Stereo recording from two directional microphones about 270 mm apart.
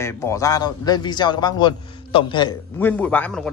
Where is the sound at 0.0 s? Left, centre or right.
Centre.